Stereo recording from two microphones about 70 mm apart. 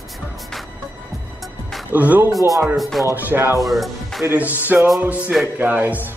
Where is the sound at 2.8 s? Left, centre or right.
Centre.